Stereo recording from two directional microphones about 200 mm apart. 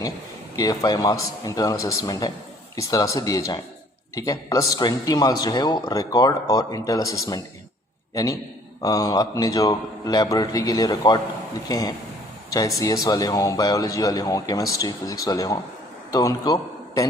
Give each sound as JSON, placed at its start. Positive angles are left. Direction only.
{"t": 0.5, "sound": "a man's voice", "side_deg": 15}